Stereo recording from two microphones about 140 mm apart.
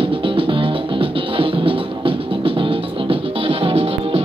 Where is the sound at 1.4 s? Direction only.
40° right (ahead or behind).